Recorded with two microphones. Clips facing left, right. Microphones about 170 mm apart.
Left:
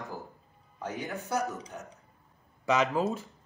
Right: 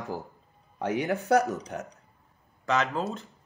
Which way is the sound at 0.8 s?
75° right (ahead or behind).